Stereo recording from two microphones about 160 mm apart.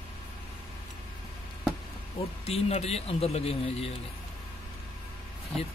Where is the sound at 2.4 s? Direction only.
40° left (ahead or behind).